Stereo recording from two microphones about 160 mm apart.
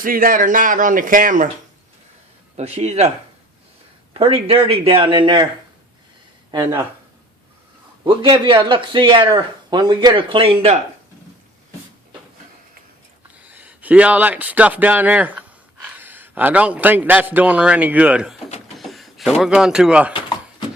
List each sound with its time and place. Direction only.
0.0 s speech: 60° right (ahead or behind)
2.6 s speech: 45° right (ahead or behind)
4.1 s speech: 35° right (ahead or behind)
6.5 s speech: 25° right (ahead or behind)
8.0 s speech: 30° right (ahead or behind)
13.4 s a man's voice: 10° right (ahead or behind)
18.8 s a sound: centre (ahead or behind)
19.4 s speech: 5° right (ahead or behind)